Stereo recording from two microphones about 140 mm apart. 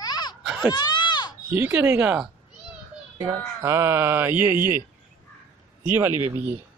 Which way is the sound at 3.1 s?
20° right (ahead or behind).